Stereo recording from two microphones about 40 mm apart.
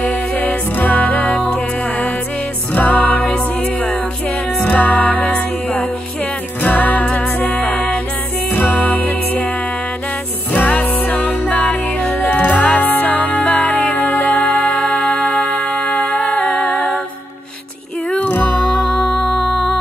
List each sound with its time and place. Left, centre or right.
0.0 s music: left
1.1 s music: left
2.7 s music: left
3.2 s music: left
4.6 s music: left
8.5 s music: left
10.5 s music: left
13.7 s music: left
14.4 s music: left
16.5 s music: centre
18.1 s music: left
18.8 s music: centre